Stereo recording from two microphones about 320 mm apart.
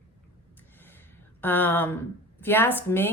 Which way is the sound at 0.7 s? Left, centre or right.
Centre.